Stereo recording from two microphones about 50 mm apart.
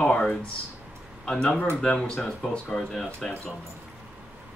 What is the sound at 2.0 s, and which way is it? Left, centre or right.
Speech, centre.